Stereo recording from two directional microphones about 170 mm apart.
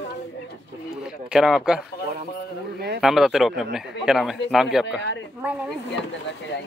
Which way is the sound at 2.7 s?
70° right (ahead or behind).